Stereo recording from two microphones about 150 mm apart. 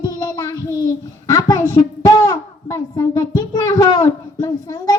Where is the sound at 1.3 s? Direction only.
25° left (ahead or behind).